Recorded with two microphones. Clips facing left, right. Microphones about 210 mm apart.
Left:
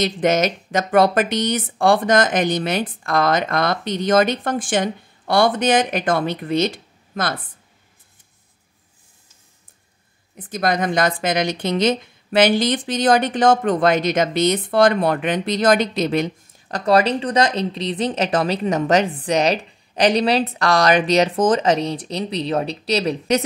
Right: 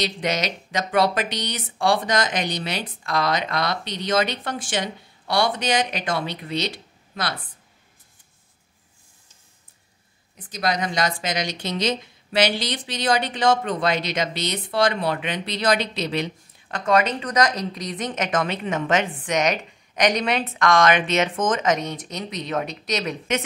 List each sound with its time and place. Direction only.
0.0 s speech: 50° left (ahead or behind)
10.3 s speech: 50° left (ahead or behind); by 23.4 s 35° left (ahead or behind)